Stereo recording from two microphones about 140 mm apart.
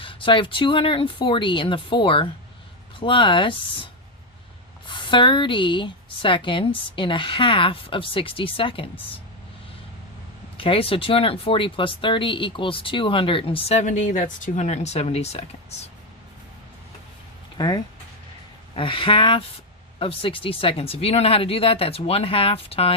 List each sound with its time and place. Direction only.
0.0 s speech: 40° left (ahead or behind)
4.9 s speech: 35° left (ahead or behind)
10.6 s speech: 40° left (ahead or behind)
17.6 s speech: 30° left (ahead or behind)